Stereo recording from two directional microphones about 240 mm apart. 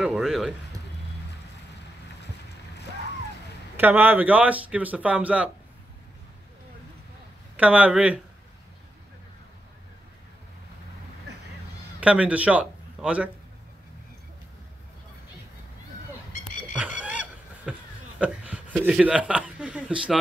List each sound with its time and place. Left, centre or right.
0.0 s speech: centre
3.7 s speech: centre
7.5 s speech: centre
12.0 s speech: centre
16.7 s fowl: centre
17.7 s a sound: centre
18.2 s speech: centre